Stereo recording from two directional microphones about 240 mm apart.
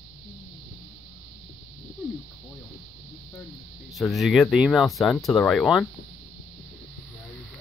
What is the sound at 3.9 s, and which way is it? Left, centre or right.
Speech, centre.